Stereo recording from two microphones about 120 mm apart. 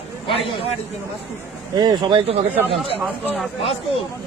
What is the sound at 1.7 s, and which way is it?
Speech, 35° right (ahead or behind).